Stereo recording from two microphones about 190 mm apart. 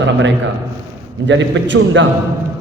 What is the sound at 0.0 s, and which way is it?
A man's voice, 70° right (ahead or behind).